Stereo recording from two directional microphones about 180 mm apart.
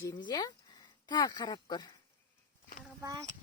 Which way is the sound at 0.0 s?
25° left (ahead or behind).